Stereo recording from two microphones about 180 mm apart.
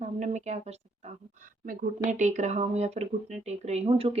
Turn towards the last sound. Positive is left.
turn(degrees=-30)  # may be behind; listen again after turning